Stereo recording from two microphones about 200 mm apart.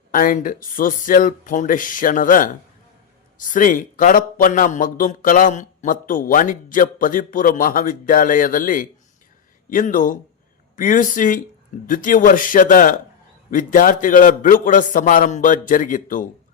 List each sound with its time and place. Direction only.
0.1 s a man's voice: 45° left (ahead or behind)